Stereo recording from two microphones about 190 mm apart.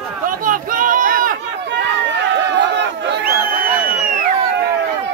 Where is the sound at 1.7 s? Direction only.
70° right (ahead or behind); by 4.1 s 50° right (ahead or behind).